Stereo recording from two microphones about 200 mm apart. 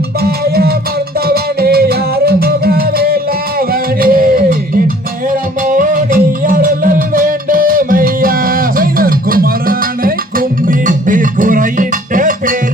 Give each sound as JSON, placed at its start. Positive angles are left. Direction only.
{"t": 0.2, "sound": "music", "side_deg": -50}
{"t": 5.6, "sound": "music", "side_deg": -40}